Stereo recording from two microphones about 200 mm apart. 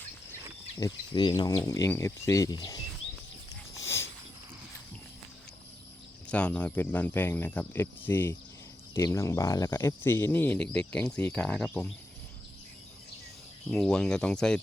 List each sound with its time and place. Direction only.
0.8 s speech: 20° left (ahead or behind)
3.5 s a sound: 15° left (ahead or behind)
6.2 s speech: 5° left (ahead or behind)
13.7 s speech: centre (ahead or behind)